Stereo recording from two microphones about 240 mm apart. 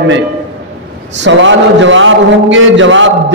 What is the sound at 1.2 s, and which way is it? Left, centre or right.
A man's voice, right.